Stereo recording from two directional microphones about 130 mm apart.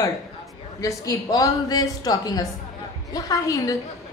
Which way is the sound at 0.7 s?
25° left (ahead or behind).